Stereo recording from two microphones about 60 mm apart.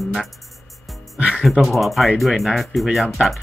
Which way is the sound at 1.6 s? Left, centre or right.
Centre.